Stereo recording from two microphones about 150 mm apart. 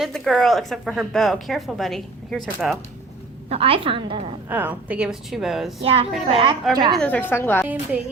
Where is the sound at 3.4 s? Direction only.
40° right (ahead or behind).